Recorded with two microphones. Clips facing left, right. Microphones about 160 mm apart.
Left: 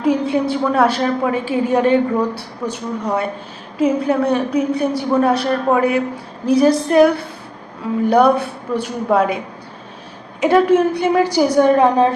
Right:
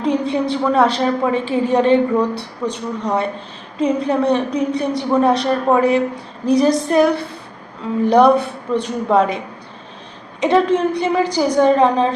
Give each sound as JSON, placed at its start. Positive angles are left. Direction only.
{"t": 0.0, "sound": "a woman's voice", "side_deg": 5}
{"t": 8.1, "sound": "a woman's voice", "side_deg": 0}
{"t": 10.4, "sound": "a woman's voice", "side_deg": 5}